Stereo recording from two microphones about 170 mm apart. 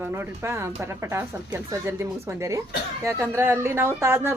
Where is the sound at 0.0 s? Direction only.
15° right (ahead or behind).